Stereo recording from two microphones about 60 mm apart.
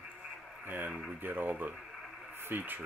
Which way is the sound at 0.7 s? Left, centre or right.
Right.